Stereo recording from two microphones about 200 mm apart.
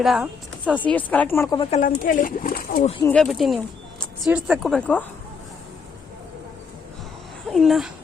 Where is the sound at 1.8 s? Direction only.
40° left (ahead or behind).